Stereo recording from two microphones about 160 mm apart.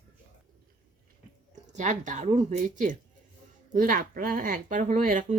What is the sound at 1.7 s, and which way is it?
Speech, 50° right (ahead or behind).